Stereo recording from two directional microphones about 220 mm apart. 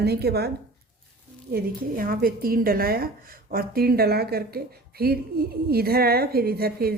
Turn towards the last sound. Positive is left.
turn(degrees=-45)  # may be behind; listen again after turning